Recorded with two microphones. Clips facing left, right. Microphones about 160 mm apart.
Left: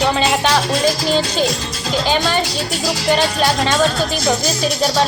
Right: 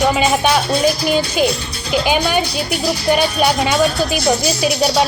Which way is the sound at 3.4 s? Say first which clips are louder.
Right 1 dB; 10° right (ahead or behind).